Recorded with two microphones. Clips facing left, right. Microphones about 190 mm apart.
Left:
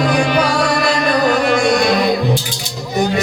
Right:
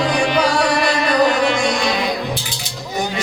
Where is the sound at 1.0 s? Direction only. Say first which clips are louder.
Even; 45° left (ahead or behind).